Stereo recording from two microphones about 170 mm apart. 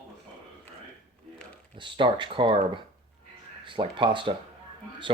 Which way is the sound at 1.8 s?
30° right (ahead or behind).